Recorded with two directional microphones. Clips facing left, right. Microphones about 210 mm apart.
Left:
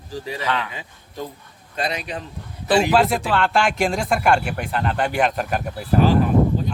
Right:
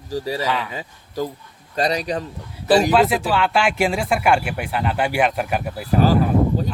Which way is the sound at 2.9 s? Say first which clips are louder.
Right 1 dB; centre (ahead or behind).